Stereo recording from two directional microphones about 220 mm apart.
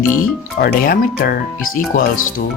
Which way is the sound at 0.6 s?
40° left (ahead or behind).